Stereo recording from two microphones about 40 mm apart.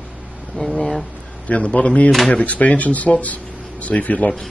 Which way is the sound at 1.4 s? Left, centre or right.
Left.